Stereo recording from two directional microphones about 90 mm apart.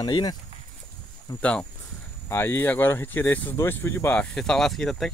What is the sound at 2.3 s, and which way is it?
Speech, 25° left (ahead or behind).